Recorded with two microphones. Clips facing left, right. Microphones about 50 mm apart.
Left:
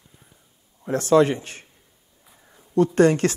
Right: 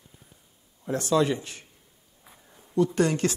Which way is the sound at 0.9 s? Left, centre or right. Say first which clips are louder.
Left 6 dB; left.